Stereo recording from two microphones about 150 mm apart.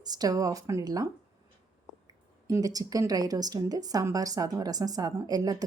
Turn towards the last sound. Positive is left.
turn(degrees=-25)  # may be behind; listen again after turning